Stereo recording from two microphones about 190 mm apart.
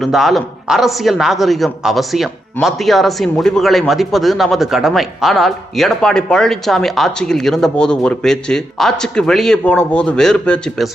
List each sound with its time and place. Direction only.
0.0 s speech: centre (ahead or behind)